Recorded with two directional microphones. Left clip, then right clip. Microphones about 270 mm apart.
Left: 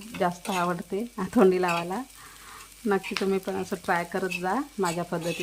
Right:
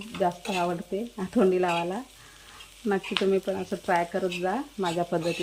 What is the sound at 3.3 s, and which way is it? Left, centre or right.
Speech, centre.